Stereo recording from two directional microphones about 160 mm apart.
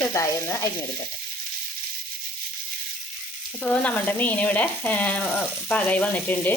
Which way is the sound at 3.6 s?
10° left (ahead or behind).